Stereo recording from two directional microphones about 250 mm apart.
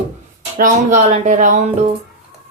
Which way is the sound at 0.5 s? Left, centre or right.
Right.